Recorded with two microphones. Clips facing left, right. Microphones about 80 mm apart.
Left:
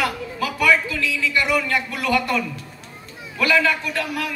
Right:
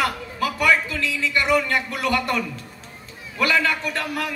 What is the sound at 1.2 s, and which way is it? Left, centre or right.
A man's voice, right.